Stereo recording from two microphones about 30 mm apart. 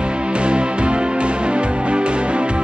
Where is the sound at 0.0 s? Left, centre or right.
Right.